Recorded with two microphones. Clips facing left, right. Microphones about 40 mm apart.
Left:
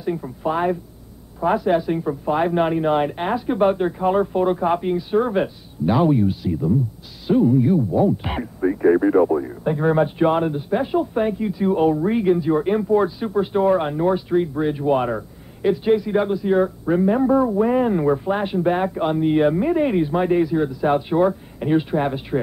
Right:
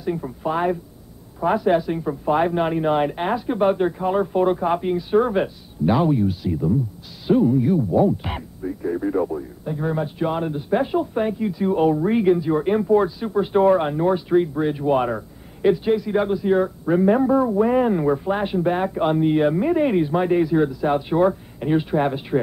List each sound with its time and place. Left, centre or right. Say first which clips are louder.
0.0 s speech: left 1 dB; centre
6.0 s speech: left 2 dB; centre
6.4 s speech: left 1 dB; centre
8.4 s speech: left 8 dB; left
9.0 s speech: left 6 dB; left
10.7 s speech: right 2 dB; centre